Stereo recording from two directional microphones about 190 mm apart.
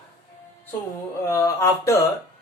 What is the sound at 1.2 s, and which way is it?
Speech, 15° left (ahead or behind).